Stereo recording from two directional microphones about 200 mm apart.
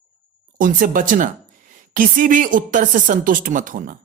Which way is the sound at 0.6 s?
45° right (ahead or behind).